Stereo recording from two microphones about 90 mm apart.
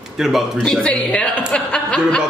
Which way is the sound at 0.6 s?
10° left (ahead or behind).